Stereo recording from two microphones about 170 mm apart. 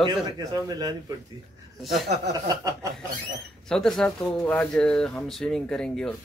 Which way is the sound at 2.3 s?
20° right (ahead or behind).